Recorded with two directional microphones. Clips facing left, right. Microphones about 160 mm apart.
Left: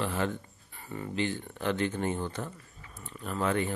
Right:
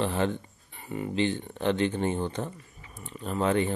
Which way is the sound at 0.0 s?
25° right (ahead or behind).